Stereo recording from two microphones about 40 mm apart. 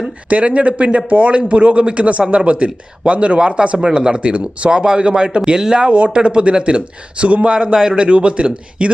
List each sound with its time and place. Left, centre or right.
0.3 s a man's voice: right